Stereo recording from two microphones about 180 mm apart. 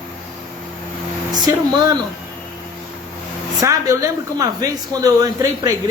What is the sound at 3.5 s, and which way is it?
Speech, 20° right (ahead or behind).